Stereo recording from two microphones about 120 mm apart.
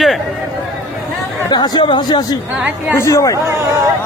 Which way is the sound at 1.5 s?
35° left (ahead or behind).